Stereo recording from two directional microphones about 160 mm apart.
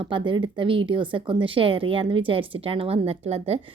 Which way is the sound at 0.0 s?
30° right (ahead or behind).